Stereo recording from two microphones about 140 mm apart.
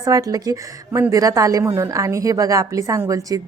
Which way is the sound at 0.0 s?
25° right (ahead or behind).